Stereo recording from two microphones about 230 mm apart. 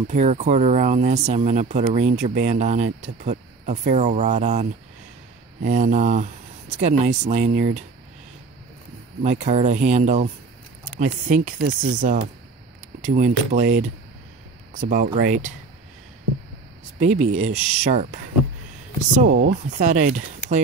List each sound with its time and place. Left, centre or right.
0.1 s speech: right
9.2 s speech: right
17.0 s speech: right